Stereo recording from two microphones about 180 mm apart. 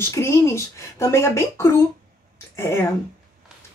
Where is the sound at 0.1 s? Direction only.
15° left (ahead or behind).